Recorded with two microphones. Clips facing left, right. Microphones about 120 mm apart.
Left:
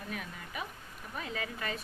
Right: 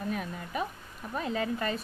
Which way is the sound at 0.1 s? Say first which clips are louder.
Right 7 dB; 35° right (ahead or behind).